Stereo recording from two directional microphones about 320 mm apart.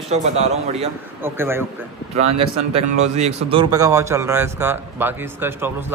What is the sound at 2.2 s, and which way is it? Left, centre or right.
Speech, centre.